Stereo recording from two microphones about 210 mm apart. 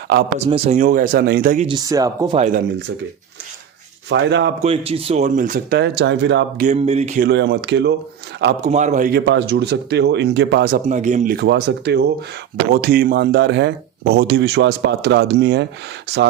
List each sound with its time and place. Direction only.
0.3 s speech: 30° right (ahead or behind); by 1.6 s 45° right (ahead or behind)
1.6 s speech: 20° right (ahead or behind)
2.4 s speech: 40° right (ahead or behind)
4.1 s speech: 55° right (ahead or behind)
4.6 s speech: 25° right (ahead or behind)
5.8 s speech: 55° right (ahead or behind)
6.7 s speech: 30° right (ahead or behind)
7.3 s speech: 55° right (ahead or behind)
8.6 s speech: 35° right (ahead or behind); by 10.8 s 50° right (ahead or behind)
10.8 s speech: 35° right (ahead or behind)
11.3 s speech: 55° right (ahead or behind)